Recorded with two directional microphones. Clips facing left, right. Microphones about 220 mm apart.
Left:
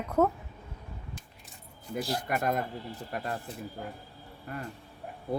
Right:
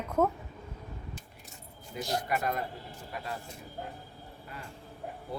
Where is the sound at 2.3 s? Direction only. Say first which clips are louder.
Left 4 dB; 50° left (ahead or behind).